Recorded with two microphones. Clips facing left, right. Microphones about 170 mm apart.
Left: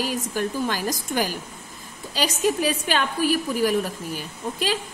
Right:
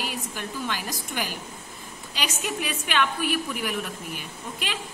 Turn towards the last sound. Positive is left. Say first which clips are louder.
# left 8 dB
turn(degrees=35)  # may be behind; listen again after turning